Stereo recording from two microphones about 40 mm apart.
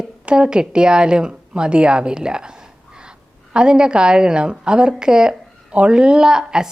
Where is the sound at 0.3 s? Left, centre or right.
Right.